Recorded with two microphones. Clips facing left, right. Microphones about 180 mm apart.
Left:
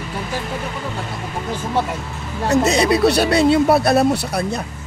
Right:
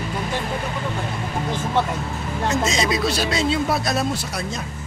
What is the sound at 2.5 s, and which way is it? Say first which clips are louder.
Speech: left 8 dB; 65° left (ahead or behind).